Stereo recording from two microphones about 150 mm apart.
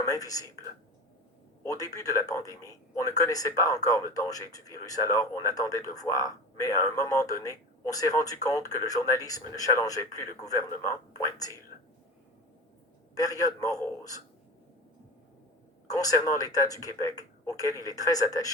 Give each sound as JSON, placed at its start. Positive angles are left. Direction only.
{"t": 0.0, "sound": "speech", "side_deg": 25}
{"t": 1.6, "sound": "speech", "side_deg": 25}
{"t": 13.1, "sound": "speech", "side_deg": 25}
{"t": 15.9, "sound": "speech", "side_deg": 25}